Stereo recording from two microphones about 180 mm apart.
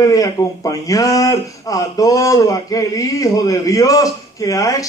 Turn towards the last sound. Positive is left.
turn(degrees=20)  # may be behind; listen again after turning